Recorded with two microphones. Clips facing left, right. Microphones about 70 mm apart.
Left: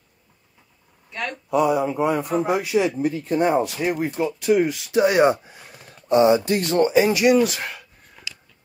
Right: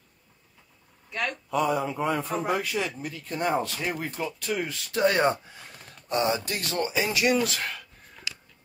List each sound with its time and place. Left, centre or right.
1.1 s speech: centre
1.5 s a man's voice: centre
6.0 s speech: left